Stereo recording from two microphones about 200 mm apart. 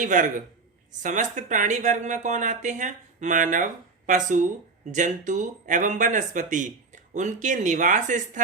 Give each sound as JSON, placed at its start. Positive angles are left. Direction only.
{"t": 0.0, "sound": "speech", "side_deg": -40}